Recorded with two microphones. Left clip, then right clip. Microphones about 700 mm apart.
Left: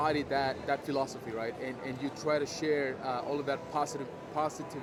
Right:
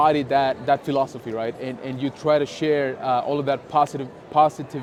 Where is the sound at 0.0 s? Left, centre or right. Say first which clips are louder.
Right 12 dB; right.